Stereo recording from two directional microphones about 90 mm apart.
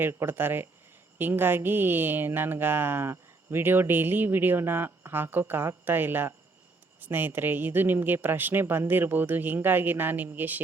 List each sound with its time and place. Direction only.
0.0 s speech: 25° right (ahead or behind)